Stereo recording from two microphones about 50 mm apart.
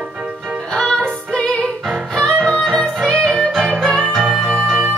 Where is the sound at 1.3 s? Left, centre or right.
Left.